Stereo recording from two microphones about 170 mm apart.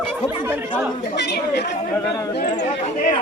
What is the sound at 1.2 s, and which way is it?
Speech, 80° left.